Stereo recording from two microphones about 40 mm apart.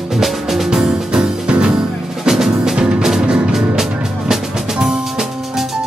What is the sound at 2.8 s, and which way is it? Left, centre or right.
Music, right.